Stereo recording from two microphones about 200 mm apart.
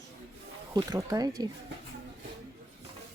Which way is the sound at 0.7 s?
20° right (ahead or behind).